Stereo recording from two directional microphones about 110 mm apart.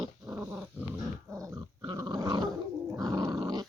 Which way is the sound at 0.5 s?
15° right (ahead or behind).